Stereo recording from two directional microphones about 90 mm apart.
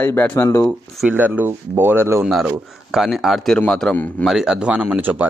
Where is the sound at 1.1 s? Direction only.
20° right (ahead or behind).